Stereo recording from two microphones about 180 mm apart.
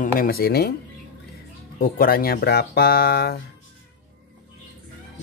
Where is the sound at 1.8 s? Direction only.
55° left (ahead or behind).